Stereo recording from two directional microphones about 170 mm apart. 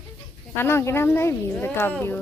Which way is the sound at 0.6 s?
15° left (ahead or behind).